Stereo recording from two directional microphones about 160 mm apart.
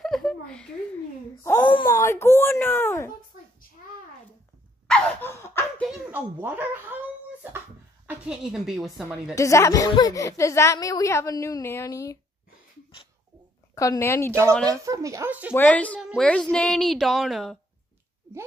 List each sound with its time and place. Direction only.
0.0 s a sound: 5° left (ahead or behind)
1.4 s a woman's voice: 20° left (ahead or behind)
4.8 s laughter: 5° left (ahead or behind)
5.9 s speech: 10° right (ahead or behind)
8.1 s a woman's voice: 5° right (ahead or behind)
9.3 s a woman's voice: 20° left (ahead or behind)
13.7 s speech: 20° left (ahead or behind)
14.5 s a woman's voice: 5° left (ahead or behind)
14.8 s speech: 20° right (ahead or behind)
15.5 s speech: 10° left (ahead or behind)
16.0 s a woman's voice: 5° right (ahead or behind)